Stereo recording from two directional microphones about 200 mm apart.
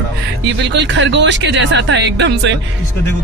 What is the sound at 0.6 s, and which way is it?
Speech, 65° right (ahead or behind).